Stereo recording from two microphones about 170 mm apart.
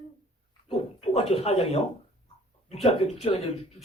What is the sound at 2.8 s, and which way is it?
Speech, 35° left (ahead or behind).